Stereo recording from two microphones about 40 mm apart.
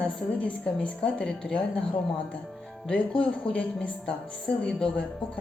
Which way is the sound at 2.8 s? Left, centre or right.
Left.